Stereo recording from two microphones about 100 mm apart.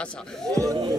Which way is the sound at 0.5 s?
35° right (ahead or behind).